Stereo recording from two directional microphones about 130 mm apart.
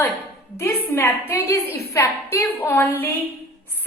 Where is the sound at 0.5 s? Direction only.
20° left (ahead or behind).